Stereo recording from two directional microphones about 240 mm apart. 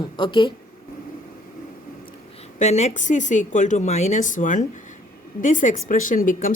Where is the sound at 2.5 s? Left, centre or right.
Left.